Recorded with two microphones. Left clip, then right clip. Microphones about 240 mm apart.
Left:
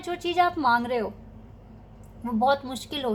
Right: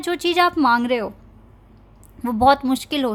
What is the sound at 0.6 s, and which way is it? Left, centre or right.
Speech, right.